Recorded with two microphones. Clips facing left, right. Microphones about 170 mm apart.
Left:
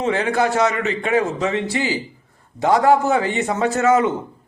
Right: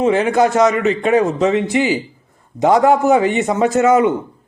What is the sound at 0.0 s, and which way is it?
A man's voice, 15° right (ahead or behind).